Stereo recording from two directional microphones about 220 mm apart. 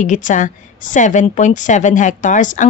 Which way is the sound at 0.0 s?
35° left (ahead or behind).